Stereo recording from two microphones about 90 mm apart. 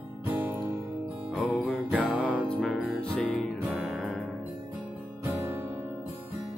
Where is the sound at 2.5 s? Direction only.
10° left (ahead or behind).